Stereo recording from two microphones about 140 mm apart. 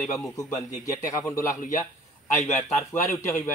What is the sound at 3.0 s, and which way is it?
Speech, 20° left (ahead or behind).